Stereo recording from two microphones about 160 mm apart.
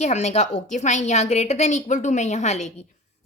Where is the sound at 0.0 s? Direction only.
45° left (ahead or behind).